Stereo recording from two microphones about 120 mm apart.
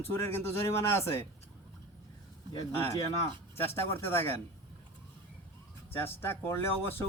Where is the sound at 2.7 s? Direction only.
20° left (ahead or behind).